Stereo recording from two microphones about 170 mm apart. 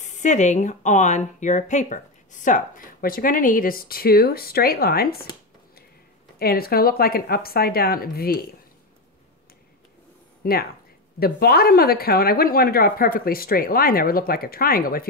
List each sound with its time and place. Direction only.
0.0 s a woman's voice: 45° left (ahead or behind); by 5.2 s 65° left (ahead or behind)
6.4 s a woman's voice: 60° left (ahead or behind)
10.4 s a woman's voice: 60° left (ahead or behind)